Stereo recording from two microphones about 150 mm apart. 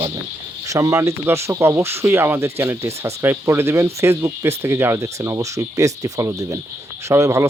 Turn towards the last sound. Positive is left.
turn(degrees=-20)  # may be behind; listen again after turning